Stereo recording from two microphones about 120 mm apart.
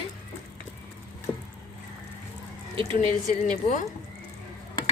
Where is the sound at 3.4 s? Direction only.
90° left.